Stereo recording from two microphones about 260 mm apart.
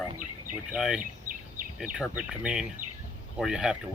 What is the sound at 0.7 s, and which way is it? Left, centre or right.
Speech, centre.